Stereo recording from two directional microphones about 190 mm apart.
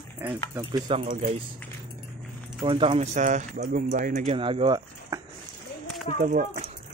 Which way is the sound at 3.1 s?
40° right (ahead or behind).